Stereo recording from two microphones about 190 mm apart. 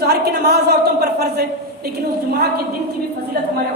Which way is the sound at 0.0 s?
60° right (ahead or behind).